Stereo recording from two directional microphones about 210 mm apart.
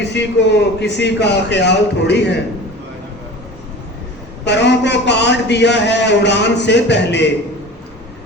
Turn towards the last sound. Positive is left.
turn(degrees=55)  # may be behind; listen again after turning